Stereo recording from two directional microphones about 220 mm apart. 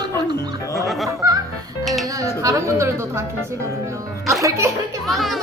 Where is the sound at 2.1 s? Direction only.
15° right (ahead or behind).